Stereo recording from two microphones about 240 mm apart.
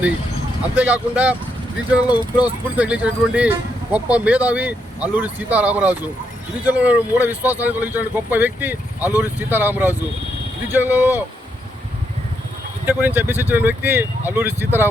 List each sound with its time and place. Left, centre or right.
0.8 s speech: centre
2.0 s speech: centre
2.7 s speech: centre
12.8 s speech: centre